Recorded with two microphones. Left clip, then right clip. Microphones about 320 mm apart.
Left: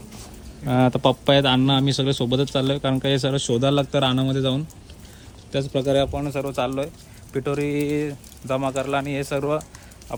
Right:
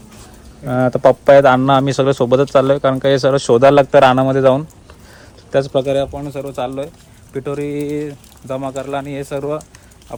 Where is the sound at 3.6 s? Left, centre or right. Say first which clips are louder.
Right 14 dB; right.